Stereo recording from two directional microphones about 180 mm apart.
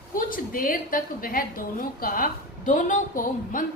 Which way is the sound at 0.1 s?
50° left (ahead or behind).